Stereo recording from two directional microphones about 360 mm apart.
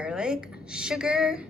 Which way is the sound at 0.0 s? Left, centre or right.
Centre.